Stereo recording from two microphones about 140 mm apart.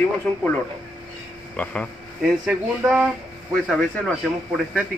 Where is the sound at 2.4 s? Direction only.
10° right (ahead or behind).